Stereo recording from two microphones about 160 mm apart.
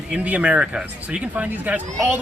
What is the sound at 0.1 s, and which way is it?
Speech, 10° right (ahead or behind).